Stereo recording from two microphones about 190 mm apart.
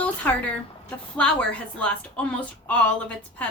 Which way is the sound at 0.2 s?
10° left (ahead or behind).